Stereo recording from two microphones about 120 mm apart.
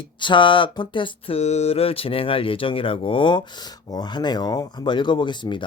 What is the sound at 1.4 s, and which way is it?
Speech, 65° left (ahead or behind).